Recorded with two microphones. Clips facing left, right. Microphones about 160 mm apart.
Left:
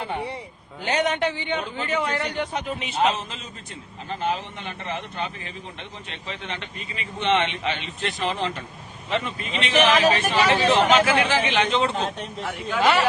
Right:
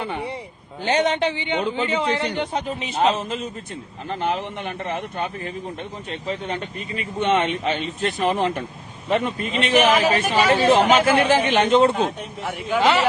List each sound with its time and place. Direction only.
0.9 s a man's voice: 25° right (ahead or behind)
2.6 s a man's voice: 40° right (ahead or behind)
9.7 s speech: 10° right (ahead or behind)
11.3 s speech: 50° right (ahead or behind)
12.8 s a man's voice: 25° right (ahead or behind)